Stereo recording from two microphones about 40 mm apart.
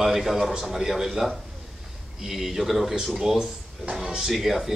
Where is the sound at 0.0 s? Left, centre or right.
Centre.